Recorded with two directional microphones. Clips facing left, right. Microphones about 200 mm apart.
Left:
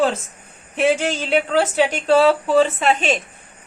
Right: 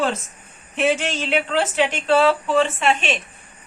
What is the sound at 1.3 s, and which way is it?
A woman's voice, 40° left (ahead or behind).